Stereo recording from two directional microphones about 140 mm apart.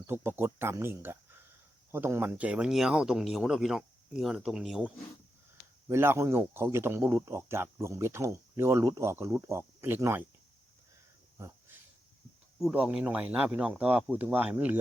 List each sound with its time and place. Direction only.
0.1 s speech: 15° right (ahead or behind)
5.9 s speech: 20° right (ahead or behind)
11.3 s cricket: 20° right (ahead or behind)
12.5 s speech: 5° right (ahead or behind)